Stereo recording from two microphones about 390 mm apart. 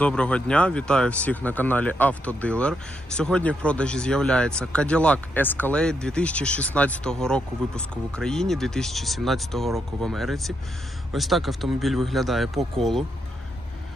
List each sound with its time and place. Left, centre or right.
0.0 s speech: centre